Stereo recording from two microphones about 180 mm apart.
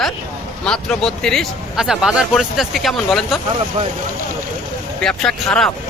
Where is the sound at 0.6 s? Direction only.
5° left (ahead or behind).